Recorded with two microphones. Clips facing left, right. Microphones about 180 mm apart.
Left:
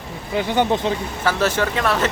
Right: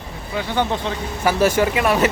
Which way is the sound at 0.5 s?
15° left (ahead or behind).